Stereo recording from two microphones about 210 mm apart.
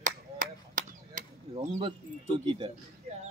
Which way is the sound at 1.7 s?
25° right (ahead or behind).